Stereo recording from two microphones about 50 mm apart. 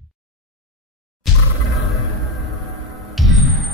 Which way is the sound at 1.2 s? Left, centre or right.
Centre.